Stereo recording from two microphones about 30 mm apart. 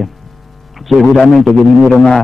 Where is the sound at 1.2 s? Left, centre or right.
Centre.